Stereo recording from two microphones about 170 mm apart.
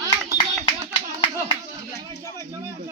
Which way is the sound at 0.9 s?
25° left (ahead or behind).